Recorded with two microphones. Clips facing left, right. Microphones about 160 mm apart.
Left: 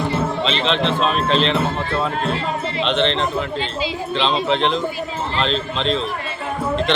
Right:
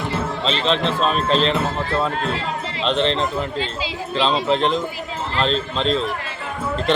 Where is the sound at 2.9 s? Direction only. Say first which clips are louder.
Even; 40° right (ahead or behind).